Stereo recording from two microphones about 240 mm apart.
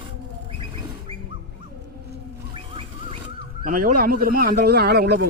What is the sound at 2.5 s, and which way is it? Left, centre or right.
Music, right.